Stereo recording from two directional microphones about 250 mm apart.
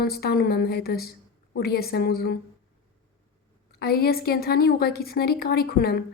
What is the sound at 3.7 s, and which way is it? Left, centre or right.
A woman's voice, left.